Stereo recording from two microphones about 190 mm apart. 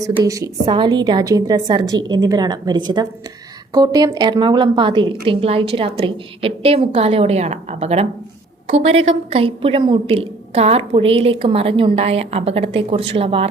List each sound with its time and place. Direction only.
0.0 s a woman's voice: 15° right (ahead or behind)